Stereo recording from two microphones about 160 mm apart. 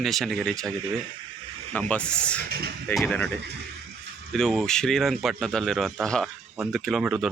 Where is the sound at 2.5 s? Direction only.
75° right (ahead or behind).